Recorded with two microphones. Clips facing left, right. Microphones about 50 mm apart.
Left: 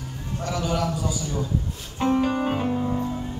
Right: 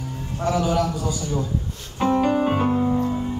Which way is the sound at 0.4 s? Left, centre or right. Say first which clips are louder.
Right 5 dB; centre.